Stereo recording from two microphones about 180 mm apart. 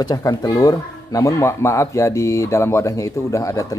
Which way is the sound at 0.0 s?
20° left (ahead or behind).